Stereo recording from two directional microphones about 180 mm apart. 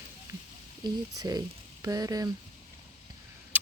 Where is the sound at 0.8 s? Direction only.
20° right (ahead or behind).